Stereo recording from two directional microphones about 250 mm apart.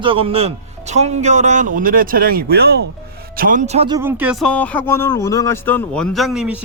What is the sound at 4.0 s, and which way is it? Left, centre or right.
Speech, centre.